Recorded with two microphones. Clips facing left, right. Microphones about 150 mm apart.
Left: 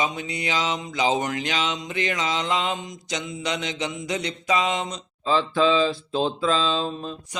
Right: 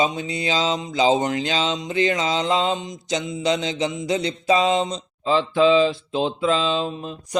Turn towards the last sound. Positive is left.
turn(degrees=-20)  # may be behind; listen again after turning